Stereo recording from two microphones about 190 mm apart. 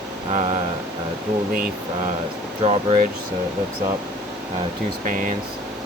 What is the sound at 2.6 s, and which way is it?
Speech, 30° right (ahead or behind).